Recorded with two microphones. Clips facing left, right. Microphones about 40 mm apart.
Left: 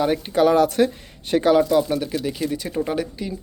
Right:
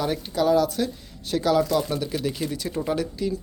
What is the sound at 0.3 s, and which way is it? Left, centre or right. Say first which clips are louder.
Speech: left 5 dB; left.